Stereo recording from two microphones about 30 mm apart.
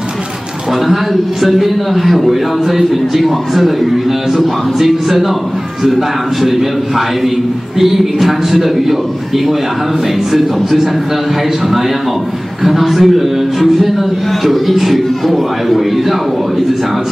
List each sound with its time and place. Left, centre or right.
1.4 s a man's voice: centre
7.8 s a man's voice: centre
12.6 s a man's voice: centre